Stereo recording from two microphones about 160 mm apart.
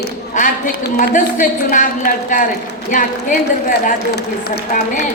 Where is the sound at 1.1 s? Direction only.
55° left (ahead or behind).